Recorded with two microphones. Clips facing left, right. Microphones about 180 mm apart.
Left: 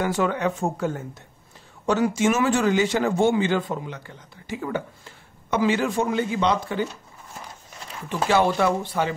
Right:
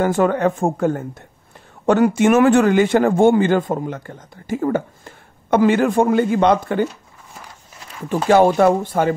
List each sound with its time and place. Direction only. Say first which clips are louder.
0.0 s speech: right 7 dB; 50° right (ahead or behind)
8.3 s speech: right 8 dB; 45° right (ahead or behind)